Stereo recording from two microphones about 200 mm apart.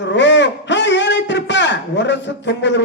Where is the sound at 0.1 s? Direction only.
60° left (ahead or behind).